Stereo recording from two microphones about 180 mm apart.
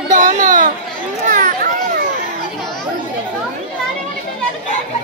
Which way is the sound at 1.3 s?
45° right (ahead or behind).